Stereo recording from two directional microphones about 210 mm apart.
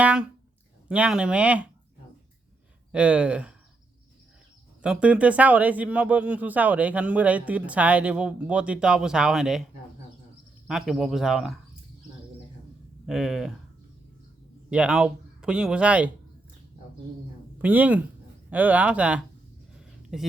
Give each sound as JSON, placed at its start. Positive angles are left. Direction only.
{"t": 0.0, "sound": "speech", "side_deg": -5}
{"t": 2.9, "sound": "speech", "side_deg": -5}
{"t": 4.8, "sound": "speech", "side_deg": -5}
{"t": 10.7, "sound": "speech", "side_deg": 0}
{"t": 13.1, "sound": "speech", "side_deg": 0}
{"t": 14.7, "sound": "speech", "side_deg": -5}
{"t": 17.6, "sound": "speech", "side_deg": -10}
{"t": 19.7, "sound": "a sound", "side_deg": 0}